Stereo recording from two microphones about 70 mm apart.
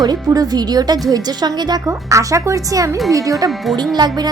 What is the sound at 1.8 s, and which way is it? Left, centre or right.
Speech, right.